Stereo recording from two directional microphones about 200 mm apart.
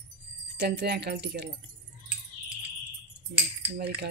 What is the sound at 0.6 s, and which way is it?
Speech, 55° right (ahead or behind).